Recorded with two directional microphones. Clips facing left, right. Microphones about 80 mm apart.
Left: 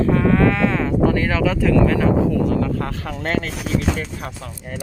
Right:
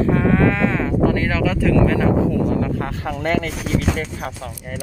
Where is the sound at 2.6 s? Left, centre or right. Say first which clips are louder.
Even; centre.